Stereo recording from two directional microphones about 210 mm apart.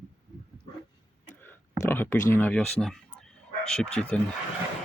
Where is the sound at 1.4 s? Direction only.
10° left (ahead or behind).